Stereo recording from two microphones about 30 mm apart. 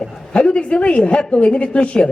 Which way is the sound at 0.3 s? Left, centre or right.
Left.